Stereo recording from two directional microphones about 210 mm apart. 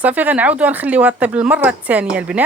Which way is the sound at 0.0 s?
10° right (ahead or behind).